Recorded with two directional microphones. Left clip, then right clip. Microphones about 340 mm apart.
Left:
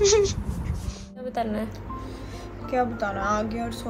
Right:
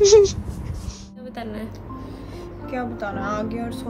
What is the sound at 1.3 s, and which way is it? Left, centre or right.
Speech, centre.